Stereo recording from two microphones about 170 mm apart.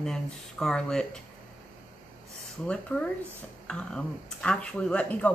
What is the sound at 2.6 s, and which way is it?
Speech, 5° left (ahead or behind).